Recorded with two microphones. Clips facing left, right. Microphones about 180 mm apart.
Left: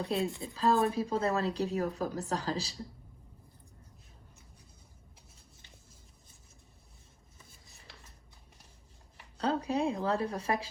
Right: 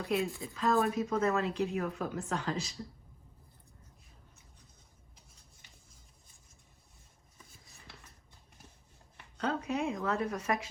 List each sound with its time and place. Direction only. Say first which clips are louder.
0.0 s speech: even; 35° left (ahead or behind)
9.4 s speech: left 3 dB; 35° left (ahead or behind)